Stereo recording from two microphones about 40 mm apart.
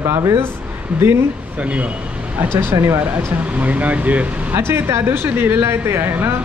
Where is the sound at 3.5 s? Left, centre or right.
Right.